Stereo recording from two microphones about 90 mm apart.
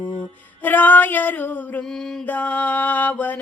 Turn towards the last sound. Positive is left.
turn(degrees=20)  # may be behind; listen again after turning